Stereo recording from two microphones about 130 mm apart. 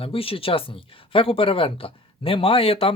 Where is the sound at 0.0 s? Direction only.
45° left (ahead or behind).